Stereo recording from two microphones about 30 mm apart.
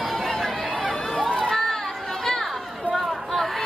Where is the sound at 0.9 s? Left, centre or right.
Left.